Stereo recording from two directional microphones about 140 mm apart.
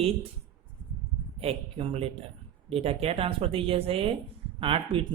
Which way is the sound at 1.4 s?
40° right (ahead or behind).